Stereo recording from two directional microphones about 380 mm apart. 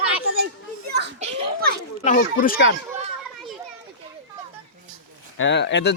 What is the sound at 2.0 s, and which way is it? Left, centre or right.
Speech, centre.